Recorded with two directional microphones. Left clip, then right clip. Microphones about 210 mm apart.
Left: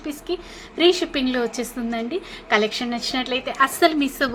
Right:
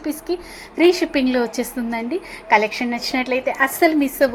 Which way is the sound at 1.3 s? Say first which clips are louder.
Right 3 dB; 15° right (ahead or behind).